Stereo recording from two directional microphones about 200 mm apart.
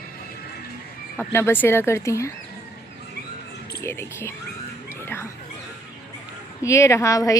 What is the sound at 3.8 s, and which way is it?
Speech, 15° left (ahead or behind).